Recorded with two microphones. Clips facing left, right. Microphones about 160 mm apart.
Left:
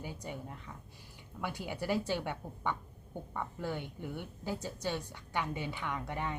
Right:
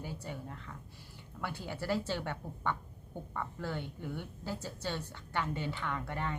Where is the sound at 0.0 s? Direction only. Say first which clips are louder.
Even; 15° left (ahead or behind).